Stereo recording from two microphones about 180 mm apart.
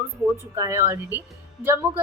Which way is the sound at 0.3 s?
15° right (ahead or behind).